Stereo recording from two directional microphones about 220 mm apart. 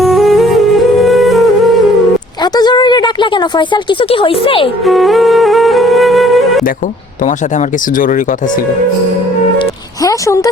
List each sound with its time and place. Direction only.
0.0 s music: centre (ahead or behind)
2.4 s a woman's voice: 20° left (ahead or behind)
4.9 s music: centre (ahead or behind)
10.0 s speech: 15° left (ahead or behind)